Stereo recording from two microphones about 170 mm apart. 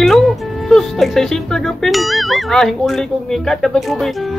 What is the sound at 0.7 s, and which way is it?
A woman's voice, centre (ahead or behind).